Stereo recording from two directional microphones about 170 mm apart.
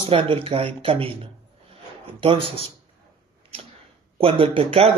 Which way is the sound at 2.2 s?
30° right (ahead or behind).